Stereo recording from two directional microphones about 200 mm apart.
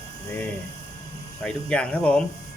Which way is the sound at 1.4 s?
5° left (ahead or behind).